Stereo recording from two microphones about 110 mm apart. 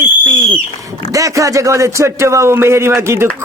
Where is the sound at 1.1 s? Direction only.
30° right (ahead or behind).